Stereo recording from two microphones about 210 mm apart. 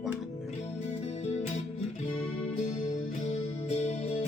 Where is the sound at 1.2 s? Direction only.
30° left (ahead or behind).